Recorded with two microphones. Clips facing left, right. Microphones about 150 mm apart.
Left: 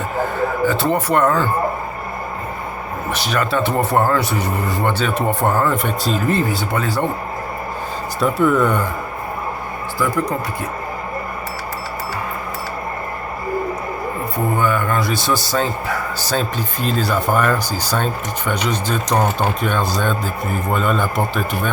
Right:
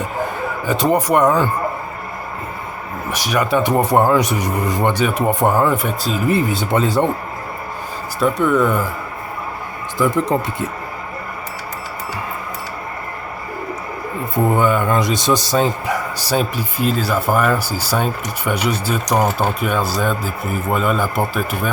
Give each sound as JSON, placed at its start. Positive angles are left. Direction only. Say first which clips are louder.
{"t": 0.6, "sound": "a man's voice", "louder": "right 4 dB", "side_deg": -15}
{"t": 3.1, "sound": "a man's voice", "louder": "right 2 dB", "side_deg": -10}
{"t": 6.5, "sound": "speech", "louder": "right 3 dB", "side_deg": -20}
{"t": 8.2, "sound": "speech", "louder": "even", "side_deg": 0}
{"t": 10.0, "sound": "speech", "louder": "right 3 dB", "side_deg": -25}
{"t": 14.6, "sound": "a man's voice", "louder": "right 3 dB", "side_deg": -20}